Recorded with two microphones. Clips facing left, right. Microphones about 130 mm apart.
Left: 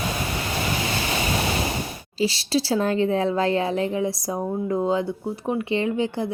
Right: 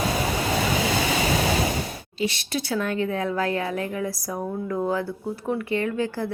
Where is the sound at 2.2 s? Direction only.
30° left (ahead or behind).